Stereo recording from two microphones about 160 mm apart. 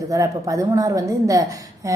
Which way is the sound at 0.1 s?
20° right (ahead or behind).